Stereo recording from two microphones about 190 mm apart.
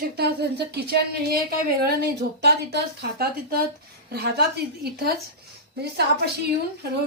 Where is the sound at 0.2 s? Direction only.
60° right (ahead or behind).